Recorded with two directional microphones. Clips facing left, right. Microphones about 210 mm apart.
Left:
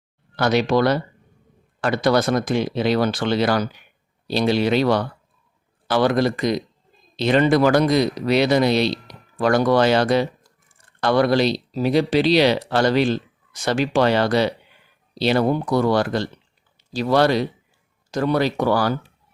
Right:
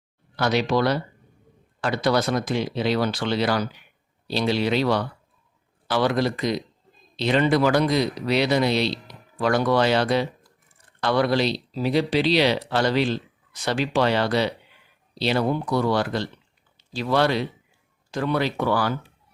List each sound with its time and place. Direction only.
0.3 s speech: 50° left (ahead or behind)